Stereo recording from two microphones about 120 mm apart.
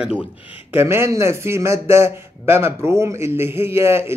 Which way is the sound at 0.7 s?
20° right (ahead or behind).